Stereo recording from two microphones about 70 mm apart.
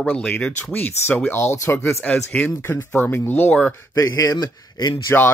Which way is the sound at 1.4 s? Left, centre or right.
Left.